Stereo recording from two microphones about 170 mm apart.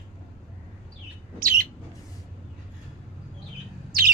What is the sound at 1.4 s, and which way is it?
Bird, 55° right (ahead or behind).